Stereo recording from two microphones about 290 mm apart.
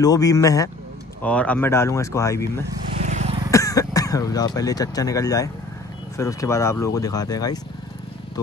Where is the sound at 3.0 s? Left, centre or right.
Right.